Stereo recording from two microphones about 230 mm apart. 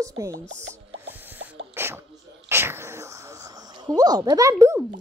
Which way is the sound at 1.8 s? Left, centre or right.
Centre.